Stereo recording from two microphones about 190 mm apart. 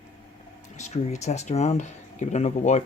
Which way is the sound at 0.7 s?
40° left (ahead or behind).